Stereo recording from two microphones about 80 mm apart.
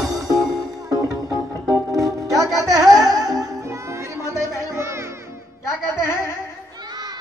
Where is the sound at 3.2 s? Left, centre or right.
Right.